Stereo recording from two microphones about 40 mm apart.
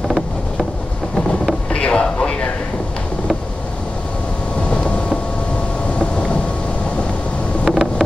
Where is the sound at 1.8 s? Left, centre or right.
Left.